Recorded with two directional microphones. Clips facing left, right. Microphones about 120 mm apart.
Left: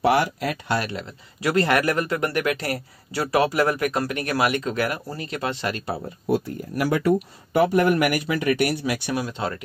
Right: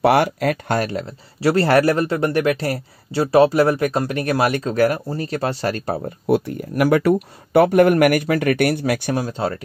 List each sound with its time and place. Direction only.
0.0 s speech: 60° right (ahead or behind); by 5.9 s 40° right (ahead or behind)
6.0 s speech: 65° right (ahead or behind)
9.1 s speech: 35° right (ahead or behind)